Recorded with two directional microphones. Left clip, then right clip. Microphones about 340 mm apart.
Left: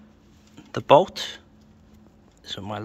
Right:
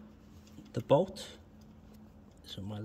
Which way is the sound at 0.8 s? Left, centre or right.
Centre.